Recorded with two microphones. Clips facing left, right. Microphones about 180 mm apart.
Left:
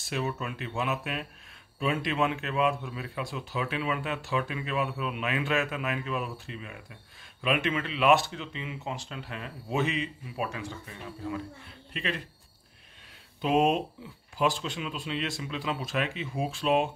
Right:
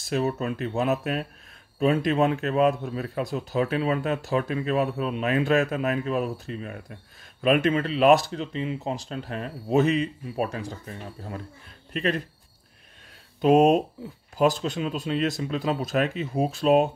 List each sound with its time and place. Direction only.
0.0 s speech: 40° right (ahead or behind)
13.4 s speech: 45° right (ahead or behind)